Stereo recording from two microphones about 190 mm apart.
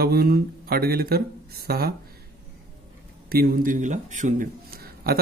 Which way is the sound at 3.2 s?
50° right (ahead or behind).